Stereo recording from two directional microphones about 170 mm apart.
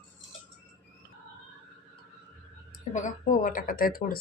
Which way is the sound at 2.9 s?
50° left (ahead or behind).